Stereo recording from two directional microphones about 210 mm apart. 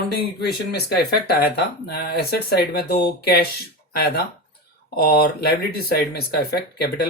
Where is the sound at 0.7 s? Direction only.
50° left (ahead or behind).